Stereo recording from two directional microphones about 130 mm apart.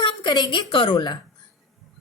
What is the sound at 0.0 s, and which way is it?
A woman's voice, 35° left (ahead or behind).